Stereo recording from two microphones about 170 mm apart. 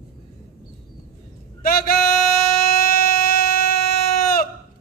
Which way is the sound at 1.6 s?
60° left (ahead or behind).